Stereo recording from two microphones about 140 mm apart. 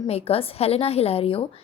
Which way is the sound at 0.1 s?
45° left (ahead or behind).